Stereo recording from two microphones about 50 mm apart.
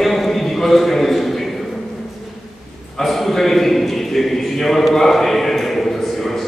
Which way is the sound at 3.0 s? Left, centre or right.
Centre.